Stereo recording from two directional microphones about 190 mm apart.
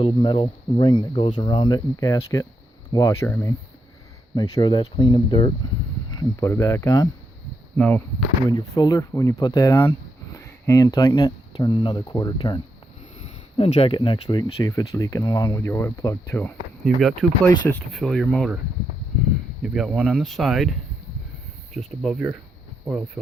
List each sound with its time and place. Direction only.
0.0 s speech: 25° left (ahead or behind)
6.1 s speech: 15° left (ahead or behind)
7.8 s speech: 5° left (ahead or behind)
8.4 s speech: 20° left (ahead or behind)
16.8 s speech: centre (ahead or behind)
19.6 s speech: 5° right (ahead or behind)